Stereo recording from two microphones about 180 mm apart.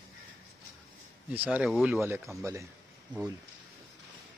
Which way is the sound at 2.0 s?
15° right (ahead or behind).